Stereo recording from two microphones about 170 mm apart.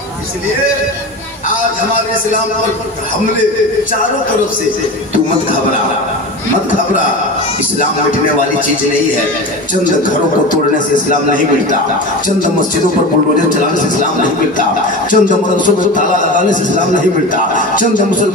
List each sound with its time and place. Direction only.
15.0 s music: 50° left (ahead or behind)